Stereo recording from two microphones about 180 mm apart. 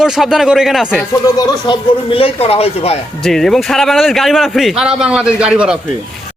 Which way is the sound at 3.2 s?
Centre (ahead or behind).